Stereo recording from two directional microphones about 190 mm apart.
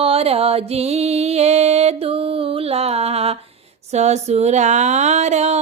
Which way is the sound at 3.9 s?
35° right (ahead or behind).